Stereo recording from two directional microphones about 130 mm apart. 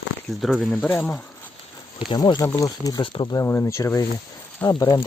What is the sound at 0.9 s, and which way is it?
Speech, 10° left (ahead or behind).